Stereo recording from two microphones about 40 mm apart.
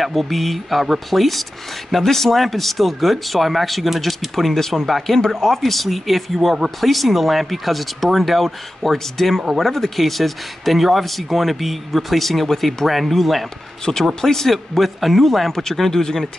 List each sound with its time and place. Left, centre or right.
0.0 s speech: centre
13.8 s speech: left
14.2 s speech: centre